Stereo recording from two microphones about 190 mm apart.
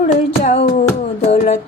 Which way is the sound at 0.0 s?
40° left (ahead or behind).